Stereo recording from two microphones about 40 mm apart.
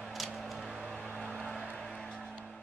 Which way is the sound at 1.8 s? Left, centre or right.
Centre.